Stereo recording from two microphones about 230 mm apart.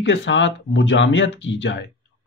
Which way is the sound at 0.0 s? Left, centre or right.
Left.